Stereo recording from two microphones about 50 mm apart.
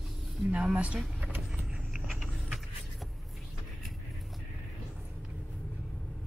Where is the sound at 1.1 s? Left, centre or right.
Right.